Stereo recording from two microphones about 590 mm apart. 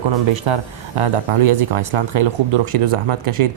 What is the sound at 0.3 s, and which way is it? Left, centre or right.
Speech, right.